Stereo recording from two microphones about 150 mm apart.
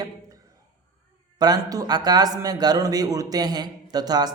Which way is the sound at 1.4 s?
25° right (ahead or behind).